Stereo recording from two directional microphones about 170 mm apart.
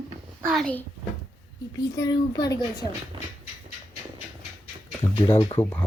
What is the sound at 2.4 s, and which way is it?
Speech, 20° left (ahead or behind).